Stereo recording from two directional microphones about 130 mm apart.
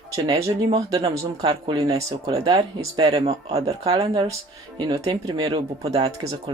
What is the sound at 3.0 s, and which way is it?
Speech, 35° right (ahead or behind).